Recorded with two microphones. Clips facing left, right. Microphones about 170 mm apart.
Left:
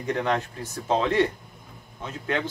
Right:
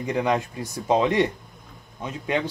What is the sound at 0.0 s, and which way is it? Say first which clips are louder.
Speech: right 2 dB; 10° right (ahead or behind).